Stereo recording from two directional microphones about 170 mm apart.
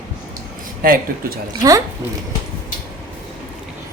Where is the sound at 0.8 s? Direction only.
60° right (ahead or behind).